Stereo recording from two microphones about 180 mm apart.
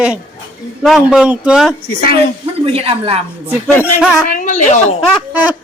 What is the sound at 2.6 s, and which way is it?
Speech, 30° right (ahead or behind).